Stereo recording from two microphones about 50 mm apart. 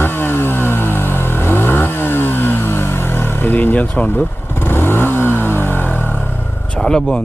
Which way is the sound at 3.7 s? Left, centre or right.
Left.